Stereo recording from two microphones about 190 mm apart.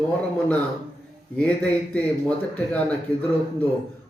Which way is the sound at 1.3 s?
5° left (ahead or behind).